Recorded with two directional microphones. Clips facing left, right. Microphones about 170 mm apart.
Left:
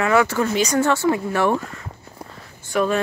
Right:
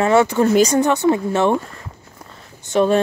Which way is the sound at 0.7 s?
20° right (ahead or behind).